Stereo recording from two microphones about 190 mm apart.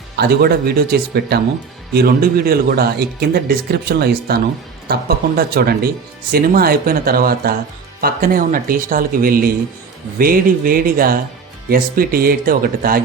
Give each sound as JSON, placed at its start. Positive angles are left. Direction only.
{"t": 0.2, "sound": "speech", "side_deg": -55}